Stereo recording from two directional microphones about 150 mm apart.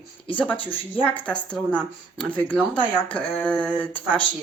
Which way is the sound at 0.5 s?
35° left (ahead or behind).